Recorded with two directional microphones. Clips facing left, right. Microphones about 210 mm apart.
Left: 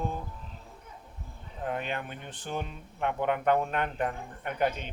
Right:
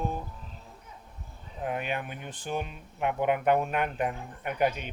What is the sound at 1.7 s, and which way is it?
Speech, 10° right (ahead or behind).